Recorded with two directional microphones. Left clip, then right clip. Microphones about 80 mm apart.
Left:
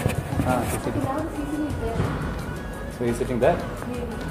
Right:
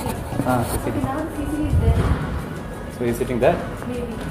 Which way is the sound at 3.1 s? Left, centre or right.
Centre.